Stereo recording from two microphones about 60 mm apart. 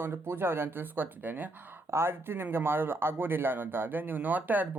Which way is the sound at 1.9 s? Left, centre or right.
Right.